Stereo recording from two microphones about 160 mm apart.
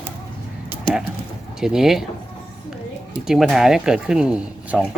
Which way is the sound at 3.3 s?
Centre (ahead or behind).